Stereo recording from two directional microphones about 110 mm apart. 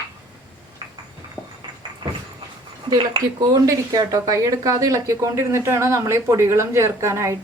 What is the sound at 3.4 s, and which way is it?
Speech, 35° right (ahead or behind).